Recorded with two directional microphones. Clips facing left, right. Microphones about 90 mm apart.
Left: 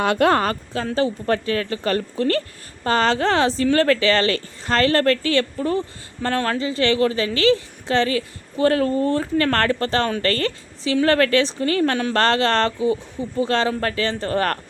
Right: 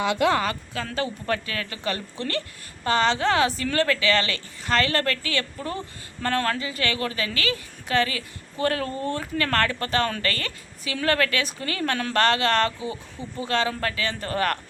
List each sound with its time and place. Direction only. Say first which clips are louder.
0.0 s a woman's voice: left 4 dB; 50° left (ahead or behind)